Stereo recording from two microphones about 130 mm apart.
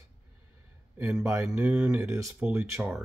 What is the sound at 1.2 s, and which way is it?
Speech, 25° right (ahead or behind).